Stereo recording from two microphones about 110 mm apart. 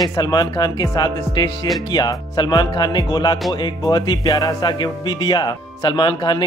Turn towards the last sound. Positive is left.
turn(degrees=45)  # may be behind; listen again after turning